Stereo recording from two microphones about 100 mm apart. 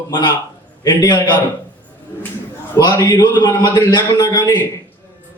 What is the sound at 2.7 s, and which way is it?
A man's voice, 40° left (ahead or behind).